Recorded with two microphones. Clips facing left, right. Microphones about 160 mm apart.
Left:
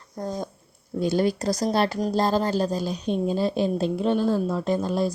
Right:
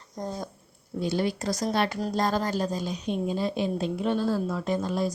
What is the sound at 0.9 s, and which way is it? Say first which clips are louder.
A woman's voice: left 5 dB; 45° left (ahead or behind).